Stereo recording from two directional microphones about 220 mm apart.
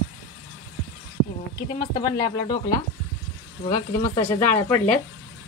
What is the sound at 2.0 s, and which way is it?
Speech, 20° left (ahead or behind).